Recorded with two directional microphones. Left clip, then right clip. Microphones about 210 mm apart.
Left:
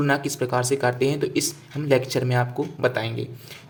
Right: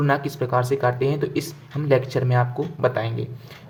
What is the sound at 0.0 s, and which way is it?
Speech, 10° left (ahead or behind).